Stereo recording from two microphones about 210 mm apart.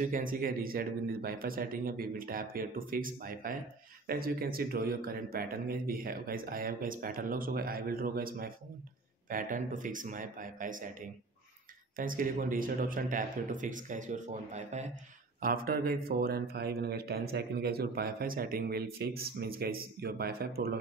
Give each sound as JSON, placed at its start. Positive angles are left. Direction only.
{"t": 0.0, "sound": "speech", "side_deg": -40}
{"t": 15.4, "sound": "speech", "side_deg": -45}